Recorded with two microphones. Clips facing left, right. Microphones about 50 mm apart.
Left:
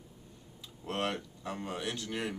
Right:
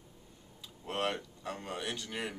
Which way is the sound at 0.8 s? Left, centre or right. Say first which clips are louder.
Even; centre.